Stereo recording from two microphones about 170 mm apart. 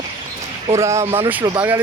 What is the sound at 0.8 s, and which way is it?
Speech, 15° right (ahead or behind).